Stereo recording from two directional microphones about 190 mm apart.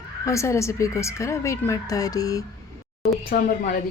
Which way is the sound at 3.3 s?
50° left (ahead or behind).